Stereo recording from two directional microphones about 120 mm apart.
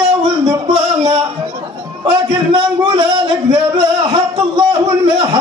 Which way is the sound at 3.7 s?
40° right (ahead or behind).